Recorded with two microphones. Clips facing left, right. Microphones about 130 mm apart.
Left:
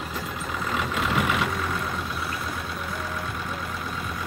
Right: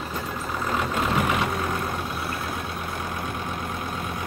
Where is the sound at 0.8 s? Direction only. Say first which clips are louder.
Right 1 dB; 40° right (ahead or behind).